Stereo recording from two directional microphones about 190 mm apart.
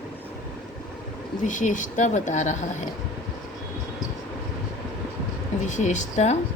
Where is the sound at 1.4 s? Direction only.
40° left (ahead or behind).